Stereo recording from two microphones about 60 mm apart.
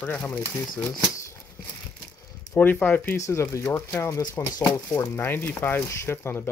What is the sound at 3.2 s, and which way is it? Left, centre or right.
Speech, left.